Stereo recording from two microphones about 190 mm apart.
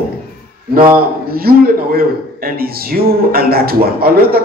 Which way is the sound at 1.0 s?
55° right (ahead or behind).